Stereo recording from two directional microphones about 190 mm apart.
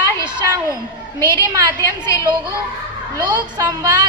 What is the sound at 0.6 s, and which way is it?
Speech, 15° left (ahead or behind).